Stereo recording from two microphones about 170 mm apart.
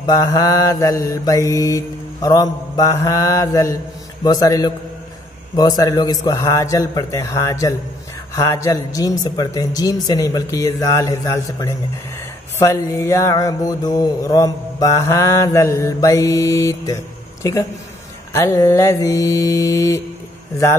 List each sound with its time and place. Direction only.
0.0 s mantra: 20° left (ahead or behind)